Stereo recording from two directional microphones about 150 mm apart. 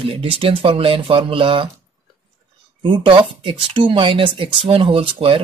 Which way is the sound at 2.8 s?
35° right (ahead or behind).